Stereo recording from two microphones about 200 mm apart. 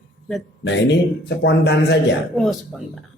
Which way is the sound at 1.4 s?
55° left (ahead or behind).